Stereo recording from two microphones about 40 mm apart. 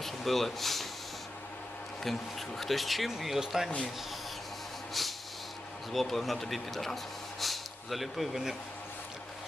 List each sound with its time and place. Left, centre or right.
0.0 s speech: centre
2.1 s speech: centre
5.0 s a sound: centre
5.9 s speech: centre